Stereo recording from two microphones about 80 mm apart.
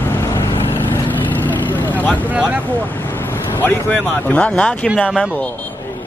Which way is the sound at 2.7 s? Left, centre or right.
Left.